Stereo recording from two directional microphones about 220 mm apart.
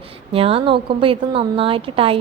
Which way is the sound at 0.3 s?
25° right (ahead or behind).